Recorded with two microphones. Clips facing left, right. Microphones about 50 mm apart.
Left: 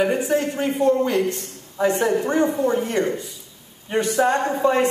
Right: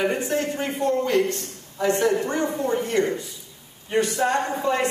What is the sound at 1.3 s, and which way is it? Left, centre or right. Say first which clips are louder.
Speech: even; left.